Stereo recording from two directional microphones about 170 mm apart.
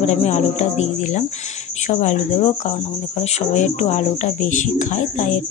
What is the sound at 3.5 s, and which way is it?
Speech, 45° left (ahead or behind).